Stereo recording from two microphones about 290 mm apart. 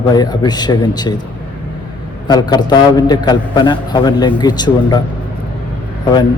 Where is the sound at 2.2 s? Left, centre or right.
Centre.